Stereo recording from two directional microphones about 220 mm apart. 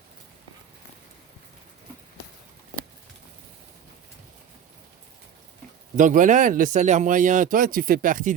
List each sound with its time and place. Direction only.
6.0 s speech: 35° right (ahead or behind)